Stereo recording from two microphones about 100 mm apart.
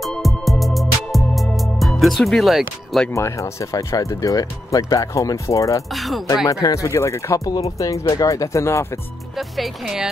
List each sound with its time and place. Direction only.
0.0 s music: centre (ahead or behind)
3.1 s speech: 30° left (ahead or behind)
5.9 s speech: centre (ahead or behind)
6.4 s speech: 35° left (ahead or behind)
9.6 s speech: 5° right (ahead or behind)